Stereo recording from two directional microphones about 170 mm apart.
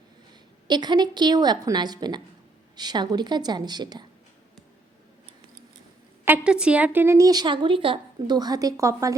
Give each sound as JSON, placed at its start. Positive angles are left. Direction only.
{"t": 0.7, "sound": "a woman's voice", "side_deg": -25}
{"t": 6.2, "sound": "a woman's voice", "side_deg": -10}